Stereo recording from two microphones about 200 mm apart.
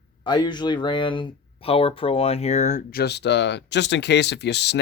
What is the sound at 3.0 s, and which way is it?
Speech, 55° left (ahead or behind).